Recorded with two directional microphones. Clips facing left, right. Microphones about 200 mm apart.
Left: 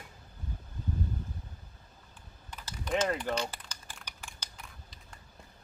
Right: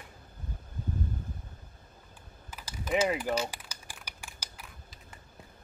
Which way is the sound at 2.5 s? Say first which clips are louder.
Right 2 dB; 5° right (ahead or behind).